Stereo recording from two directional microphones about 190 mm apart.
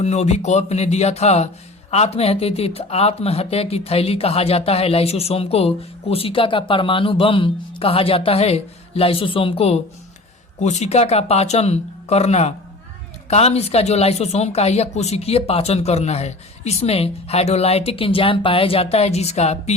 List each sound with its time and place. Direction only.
0.0 s speech: 35° left (ahead or behind)